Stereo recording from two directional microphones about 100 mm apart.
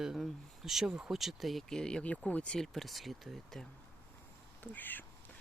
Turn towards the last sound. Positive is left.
turn(degrees=20)  # may be behind; listen again after turning